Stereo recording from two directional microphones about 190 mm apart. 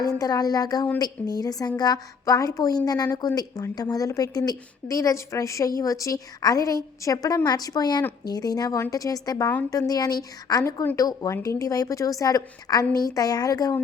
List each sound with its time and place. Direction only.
0.0 s a woman's voice: 20° left (ahead or behind)